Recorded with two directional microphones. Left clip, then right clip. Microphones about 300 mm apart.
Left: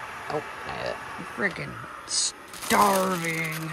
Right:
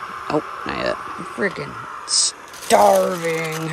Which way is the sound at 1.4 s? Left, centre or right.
Centre.